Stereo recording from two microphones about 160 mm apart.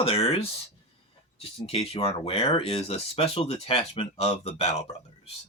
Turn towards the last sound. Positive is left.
turn(degrees=40)  # may be behind; listen again after turning